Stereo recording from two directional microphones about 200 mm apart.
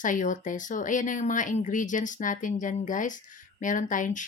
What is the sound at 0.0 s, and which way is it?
Speech, 40° left (ahead or behind).